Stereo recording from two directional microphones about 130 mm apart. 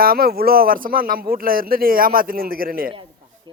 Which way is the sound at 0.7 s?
90° right.